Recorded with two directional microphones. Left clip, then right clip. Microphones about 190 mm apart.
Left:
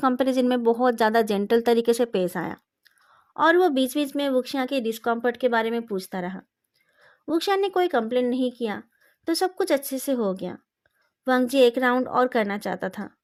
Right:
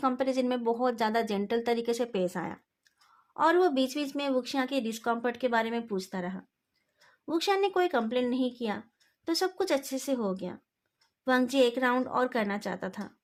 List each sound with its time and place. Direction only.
0.0 s speech: 40° left (ahead or behind)